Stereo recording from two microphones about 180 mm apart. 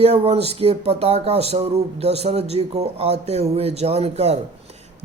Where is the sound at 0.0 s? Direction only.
35° right (ahead or behind).